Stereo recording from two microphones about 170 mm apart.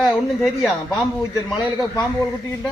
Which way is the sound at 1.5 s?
25° left (ahead or behind).